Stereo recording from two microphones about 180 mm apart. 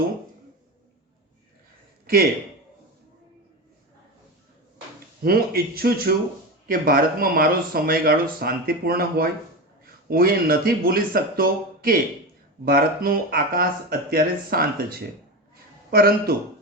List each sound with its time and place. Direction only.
5.2 s speech: 55° right (ahead or behind)